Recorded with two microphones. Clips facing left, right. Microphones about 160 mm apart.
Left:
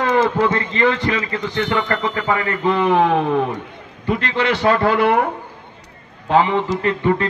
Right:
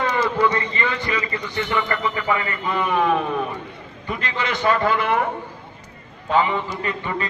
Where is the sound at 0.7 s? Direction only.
85° left.